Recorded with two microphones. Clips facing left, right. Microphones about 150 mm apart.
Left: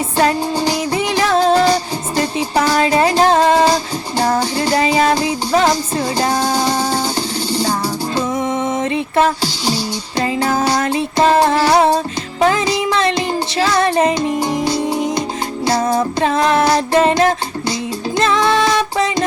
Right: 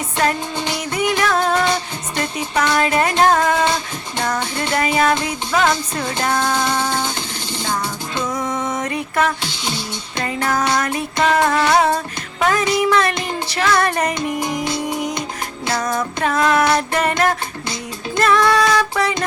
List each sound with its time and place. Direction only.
0.2 s music: 35° left (ahead or behind)